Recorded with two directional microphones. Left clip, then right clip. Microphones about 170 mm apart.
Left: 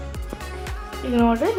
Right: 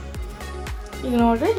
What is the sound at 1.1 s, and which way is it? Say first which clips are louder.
Speech: even; 20° right (ahead or behind).